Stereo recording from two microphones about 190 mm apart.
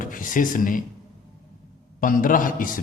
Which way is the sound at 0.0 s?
45° left (ahead or behind).